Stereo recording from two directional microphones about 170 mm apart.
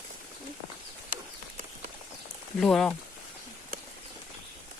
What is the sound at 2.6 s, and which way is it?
Speech, 5° left (ahead or behind).